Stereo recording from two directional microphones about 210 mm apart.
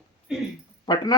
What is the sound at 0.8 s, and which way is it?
Speech, 20° left (ahead or behind).